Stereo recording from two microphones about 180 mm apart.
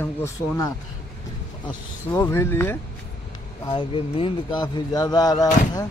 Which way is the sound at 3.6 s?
30° left (ahead or behind).